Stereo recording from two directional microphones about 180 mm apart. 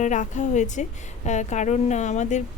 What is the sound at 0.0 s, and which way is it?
A woman's voice, 45° left (ahead or behind).